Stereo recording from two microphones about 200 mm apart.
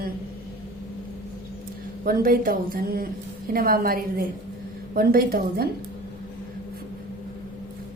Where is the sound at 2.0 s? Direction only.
45° right (ahead or behind).